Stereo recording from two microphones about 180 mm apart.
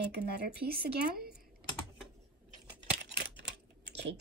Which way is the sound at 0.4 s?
55° right (ahead or behind).